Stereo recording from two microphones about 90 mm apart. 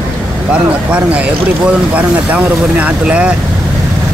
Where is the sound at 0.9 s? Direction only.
15° right (ahead or behind).